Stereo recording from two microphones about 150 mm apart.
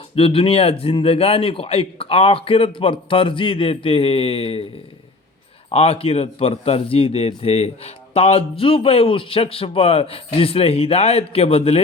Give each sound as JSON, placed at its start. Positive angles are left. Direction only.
{"t": 0.2, "sound": "a man's voice", "side_deg": 40}
{"t": 5.7, "sound": "a man's voice", "side_deg": 40}